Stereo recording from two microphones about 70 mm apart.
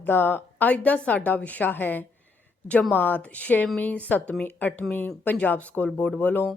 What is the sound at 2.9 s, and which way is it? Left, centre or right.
A woman's voice, left.